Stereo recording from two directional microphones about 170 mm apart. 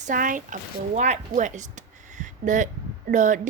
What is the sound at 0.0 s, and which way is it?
A woman's voice, 50° right (ahead or behind).